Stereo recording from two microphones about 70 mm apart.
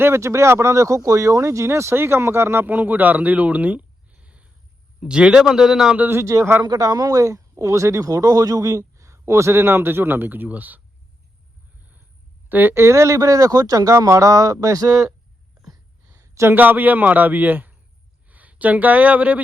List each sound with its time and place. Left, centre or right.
0.0 s a man's voice: right; by 6.0 s centre
6.1 s speech: right
6.6 s a man's voice: right
12.5 s a man's voice: right
15.7 s a sound: right
16.5 s a man's voice: right